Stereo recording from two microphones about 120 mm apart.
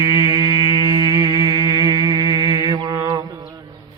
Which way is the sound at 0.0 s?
30° right (ahead or behind).